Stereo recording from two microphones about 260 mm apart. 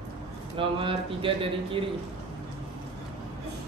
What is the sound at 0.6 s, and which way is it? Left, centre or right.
Speech, centre.